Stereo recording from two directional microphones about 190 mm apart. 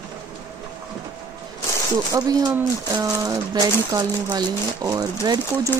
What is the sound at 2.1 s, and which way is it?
Speech, 20° right (ahead or behind).